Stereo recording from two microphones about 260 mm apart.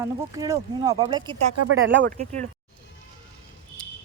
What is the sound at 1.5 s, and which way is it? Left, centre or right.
Speech, right.